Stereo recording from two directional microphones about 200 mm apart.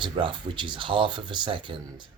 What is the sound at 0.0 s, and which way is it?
Speech, 25° right (ahead or behind).